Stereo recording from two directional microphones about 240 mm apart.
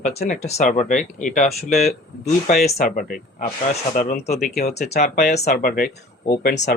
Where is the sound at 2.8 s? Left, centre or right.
Left.